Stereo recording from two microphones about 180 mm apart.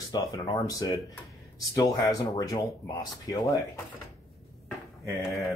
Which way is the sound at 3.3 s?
Centre (ahead or behind).